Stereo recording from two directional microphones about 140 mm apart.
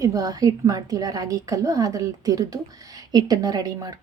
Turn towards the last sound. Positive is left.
turn(degrees=-25)  # may be behind; listen again after turning